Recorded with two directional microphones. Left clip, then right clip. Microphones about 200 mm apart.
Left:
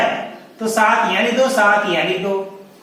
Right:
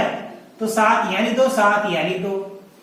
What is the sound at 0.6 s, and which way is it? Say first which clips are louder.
A man's voice: left 2 dB; 15° left (ahead or behind).